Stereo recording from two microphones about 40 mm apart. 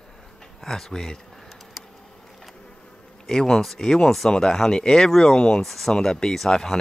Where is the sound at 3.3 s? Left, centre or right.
Centre.